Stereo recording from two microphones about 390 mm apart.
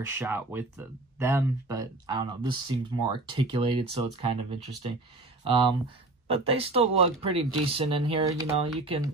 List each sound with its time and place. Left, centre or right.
0.0 s speech: centre